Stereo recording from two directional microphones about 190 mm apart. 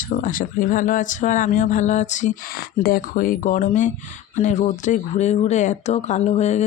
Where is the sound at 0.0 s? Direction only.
45° left (ahead or behind).